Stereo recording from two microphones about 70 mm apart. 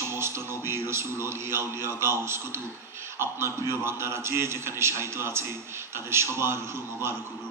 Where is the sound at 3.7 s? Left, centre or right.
Right.